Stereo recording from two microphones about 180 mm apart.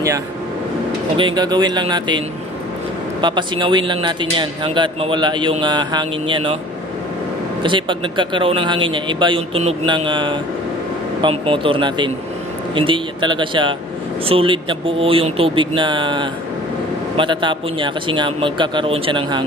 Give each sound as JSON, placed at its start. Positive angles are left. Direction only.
{"t": 1.1, "sound": "speech", "side_deg": -25}
{"t": 7.6, "sound": "speech", "side_deg": -25}